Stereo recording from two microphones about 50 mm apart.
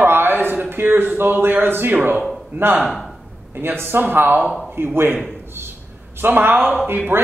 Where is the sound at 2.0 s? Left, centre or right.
Right.